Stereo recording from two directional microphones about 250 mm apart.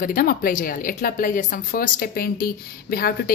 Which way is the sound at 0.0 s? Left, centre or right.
Left.